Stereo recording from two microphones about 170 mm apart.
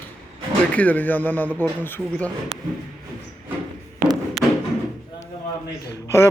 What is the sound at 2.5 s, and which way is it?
Speech, 35° right (ahead or behind).